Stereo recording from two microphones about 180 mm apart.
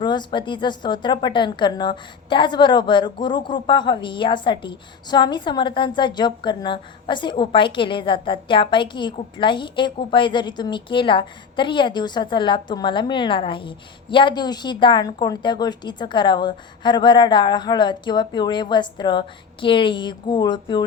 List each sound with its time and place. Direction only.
0.0 s a woman's voice: 25° left (ahead or behind)